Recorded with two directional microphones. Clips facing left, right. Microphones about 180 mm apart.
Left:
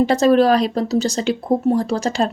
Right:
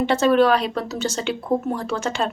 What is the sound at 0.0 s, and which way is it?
Speech, 40° left (ahead or behind).